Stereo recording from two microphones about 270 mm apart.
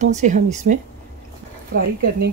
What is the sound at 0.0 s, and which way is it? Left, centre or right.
Speech, right.